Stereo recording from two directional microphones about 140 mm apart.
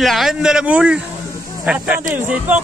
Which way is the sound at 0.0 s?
Centre (ahead or behind).